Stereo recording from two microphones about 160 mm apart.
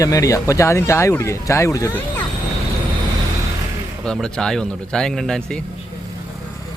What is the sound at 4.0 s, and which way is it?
Speech, 5° left (ahead or behind).